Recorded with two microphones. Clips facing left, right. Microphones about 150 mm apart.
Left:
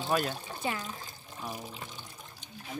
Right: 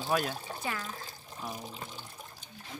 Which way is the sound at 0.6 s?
20° left (ahead or behind).